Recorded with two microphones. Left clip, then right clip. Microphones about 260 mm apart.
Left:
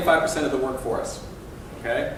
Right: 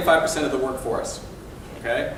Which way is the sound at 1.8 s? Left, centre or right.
Centre.